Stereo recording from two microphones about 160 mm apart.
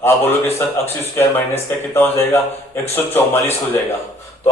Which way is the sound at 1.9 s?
15° left (ahead or behind).